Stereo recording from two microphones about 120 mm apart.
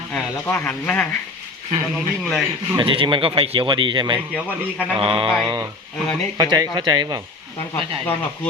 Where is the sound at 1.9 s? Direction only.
Centre (ahead or behind).